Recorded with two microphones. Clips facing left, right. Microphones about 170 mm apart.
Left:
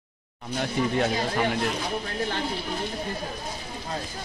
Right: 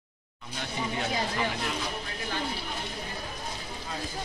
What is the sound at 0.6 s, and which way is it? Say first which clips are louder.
Speech: left 8 dB; 50° left (ahead or behind).